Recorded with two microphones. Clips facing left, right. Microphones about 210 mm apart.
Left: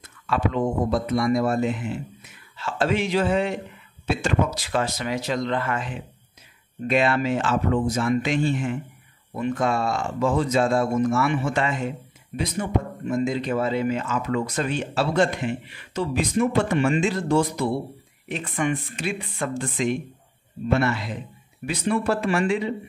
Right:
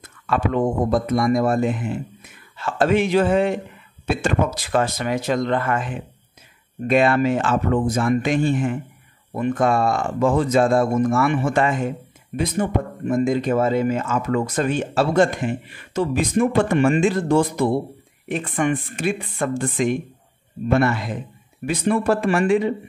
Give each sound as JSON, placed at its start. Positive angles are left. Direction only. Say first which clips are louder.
{"t": 0.3, "sound": "speech", "louder": "right 3 dB", "side_deg": -50}